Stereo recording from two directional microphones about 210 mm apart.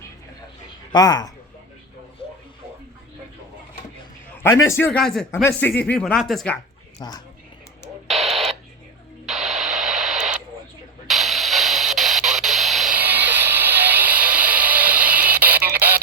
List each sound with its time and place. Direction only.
0.9 s speech: 20° left (ahead or behind)
4.7 s speech: 10° left (ahead or behind)
7.0 s speech: 15° left (ahead or behind)
9.2 s radio: centre (ahead or behind)